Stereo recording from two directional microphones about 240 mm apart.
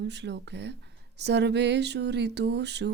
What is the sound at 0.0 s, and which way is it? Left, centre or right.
Speech, right.